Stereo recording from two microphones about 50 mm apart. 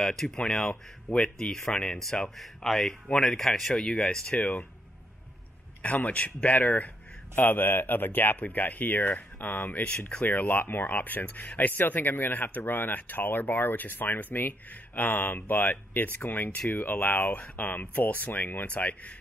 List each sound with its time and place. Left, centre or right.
0.0 s speech: centre
0.7 s speech: centre
4.3 s speech: left
5.8 s speech: left
9.8 s speech: left
10.2 s speech: left
18.7 s speech: left